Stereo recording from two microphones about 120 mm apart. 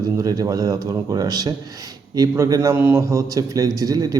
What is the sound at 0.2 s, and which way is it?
A man's voice, 30° right (ahead or behind).